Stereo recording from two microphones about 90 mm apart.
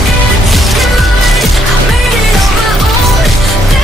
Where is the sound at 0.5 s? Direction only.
Centre (ahead or behind).